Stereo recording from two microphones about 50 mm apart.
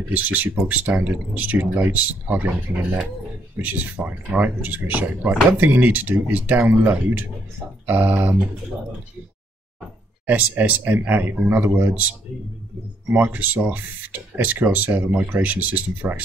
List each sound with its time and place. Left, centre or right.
0.1 s speech: right
3.6 s speech: right
7.8 s speech: right
10.2 s speech: right
11.9 s speech: right